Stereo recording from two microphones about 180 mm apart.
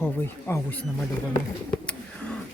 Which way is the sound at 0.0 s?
15° left (ahead or behind).